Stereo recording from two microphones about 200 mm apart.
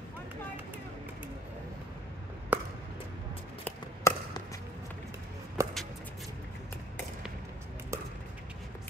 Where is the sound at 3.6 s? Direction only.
15° left (ahead or behind).